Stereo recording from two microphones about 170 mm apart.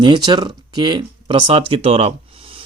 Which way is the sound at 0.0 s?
25° right (ahead or behind).